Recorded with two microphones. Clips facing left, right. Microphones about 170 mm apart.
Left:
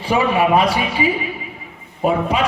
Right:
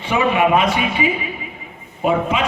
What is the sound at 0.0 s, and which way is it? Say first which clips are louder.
Speech: even; 35° left (ahead or behind).